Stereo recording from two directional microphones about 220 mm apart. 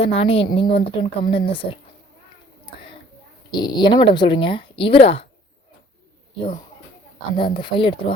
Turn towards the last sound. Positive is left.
turn(degrees=20)  # may be behind; listen again after turning